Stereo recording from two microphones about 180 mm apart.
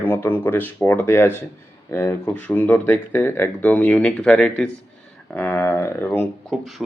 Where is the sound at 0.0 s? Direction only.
10° left (ahead or behind).